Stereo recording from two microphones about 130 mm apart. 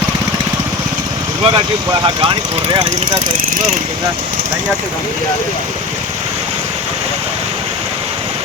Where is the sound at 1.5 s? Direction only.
35° right (ahead or behind).